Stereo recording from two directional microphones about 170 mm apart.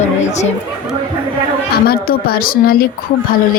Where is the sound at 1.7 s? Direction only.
65° left (ahead or behind).